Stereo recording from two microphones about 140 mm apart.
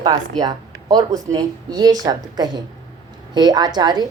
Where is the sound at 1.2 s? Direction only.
25° right (ahead or behind).